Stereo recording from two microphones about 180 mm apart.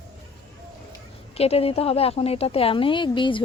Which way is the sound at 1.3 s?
35° left (ahead or behind).